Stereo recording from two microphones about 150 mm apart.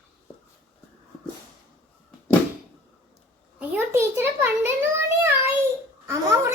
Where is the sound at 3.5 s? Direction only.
10° right (ahead or behind).